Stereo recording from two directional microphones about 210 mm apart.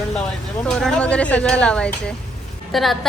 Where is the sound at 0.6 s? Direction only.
5° left (ahead or behind).